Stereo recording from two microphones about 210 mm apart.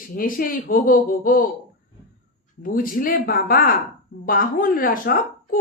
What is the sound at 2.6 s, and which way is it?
A woman's voice, 40° left (ahead or behind).